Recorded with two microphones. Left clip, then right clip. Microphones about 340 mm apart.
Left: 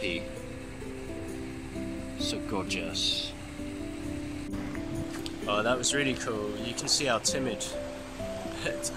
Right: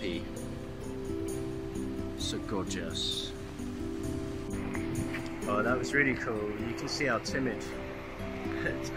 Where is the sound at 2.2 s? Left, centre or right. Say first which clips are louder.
Left 4 dB; centre.